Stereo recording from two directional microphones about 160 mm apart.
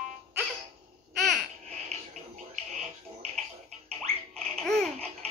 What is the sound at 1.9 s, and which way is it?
Music, 45° right (ahead or behind).